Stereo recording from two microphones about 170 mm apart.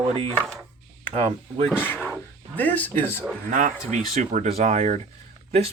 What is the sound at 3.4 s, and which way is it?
Speech, 50° right (ahead or behind).